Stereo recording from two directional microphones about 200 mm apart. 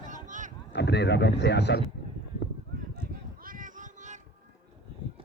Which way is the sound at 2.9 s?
50° right (ahead or behind).